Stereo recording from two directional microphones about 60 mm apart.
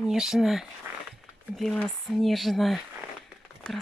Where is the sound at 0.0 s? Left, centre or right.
Centre.